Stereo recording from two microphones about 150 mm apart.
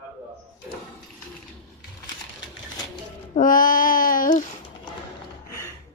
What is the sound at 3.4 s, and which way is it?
Child singing, 65° left (ahead or behind).